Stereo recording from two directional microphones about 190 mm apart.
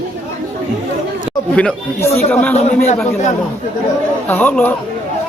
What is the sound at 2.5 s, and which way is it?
Speech, 35° left (ahead or behind).